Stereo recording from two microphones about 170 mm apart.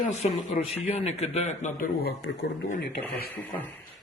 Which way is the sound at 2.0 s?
75° left (ahead or behind).